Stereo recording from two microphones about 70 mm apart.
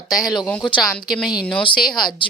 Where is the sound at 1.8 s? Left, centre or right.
Centre.